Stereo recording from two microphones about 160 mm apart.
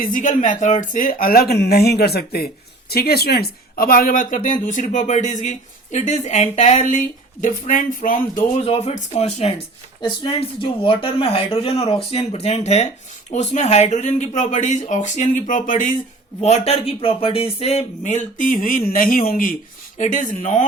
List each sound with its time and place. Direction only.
0.0 s speech: 55° left (ahead or behind)
8.6 s speech: 40° left (ahead or behind)
10.6 s speech: 35° left (ahead or behind); by 16.0 s 55° left (ahead or behind)
16.4 s a man's voice: 40° left (ahead or behind)